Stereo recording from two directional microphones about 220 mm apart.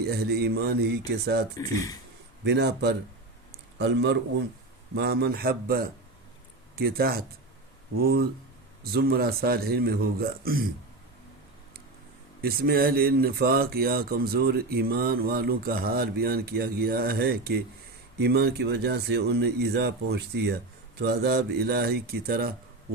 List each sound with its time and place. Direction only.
0.0 s speech: 45° right (ahead or behind)
1.5 s speech: 15° left (ahead or behind)
2.4 s speech: 50° right (ahead or behind)
12.4 s speech: 45° right (ahead or behind)